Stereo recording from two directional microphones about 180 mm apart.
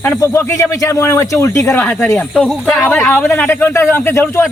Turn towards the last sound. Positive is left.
turn(degrees=15)  # may be behind; listen again after turning